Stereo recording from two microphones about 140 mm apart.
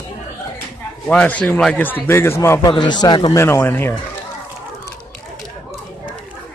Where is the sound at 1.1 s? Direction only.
10° left (ahead or behind).